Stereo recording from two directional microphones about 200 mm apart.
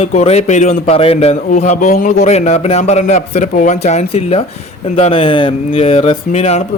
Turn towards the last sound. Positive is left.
turn(degrees=35)  # may be behind; listen again after turning